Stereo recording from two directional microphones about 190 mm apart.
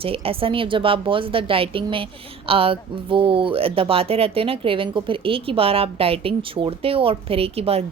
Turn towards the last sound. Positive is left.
turn(degrees=-30)  # may be behind; listen again after turning